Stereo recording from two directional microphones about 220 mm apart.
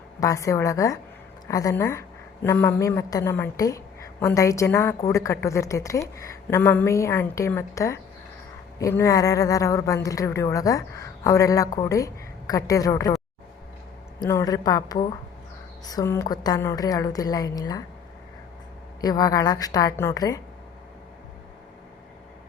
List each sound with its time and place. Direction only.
0.2 s a woman's voice: 15° left (ahead or behind)
14.2 s a woman's voice: 15° left (ahead or behind)
19.0 s a woman's voice: 15° left (ahead or behind)